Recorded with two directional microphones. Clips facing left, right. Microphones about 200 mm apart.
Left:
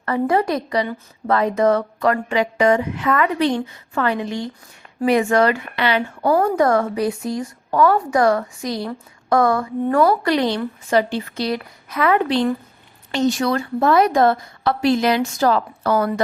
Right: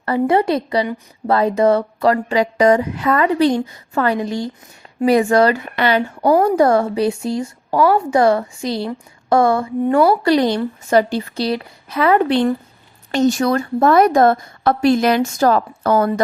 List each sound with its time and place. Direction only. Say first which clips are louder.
0.0 s a woman's voice: right 3 dB; 30° right (ahead or behind); by 6.0 s 45° right (ahead or behind)
6.4 s a woman's voice: right 3 dB; 30° right (ahead or behind)
10.2 s speech: right 4 dB; 40° right (ahead or behind)
13.1 s a woman's voice: right 3 dB; 45° right (ahead or behind)